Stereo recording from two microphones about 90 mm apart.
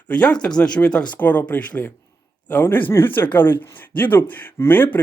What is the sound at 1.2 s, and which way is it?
Speech, 20° left (ahead or behind).